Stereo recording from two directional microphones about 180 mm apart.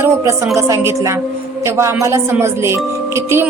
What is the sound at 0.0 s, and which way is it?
Speech, 15° right (ahead or behind).